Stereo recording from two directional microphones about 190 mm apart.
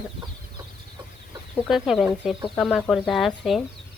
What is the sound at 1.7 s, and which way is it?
Speech, centre (ahead or behind).